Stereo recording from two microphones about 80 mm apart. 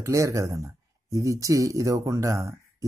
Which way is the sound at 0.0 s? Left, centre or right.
Right.